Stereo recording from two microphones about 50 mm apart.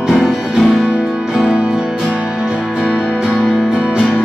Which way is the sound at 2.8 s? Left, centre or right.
Right.